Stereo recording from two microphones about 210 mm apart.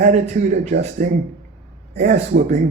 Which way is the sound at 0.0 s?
35° right (ahead or behind).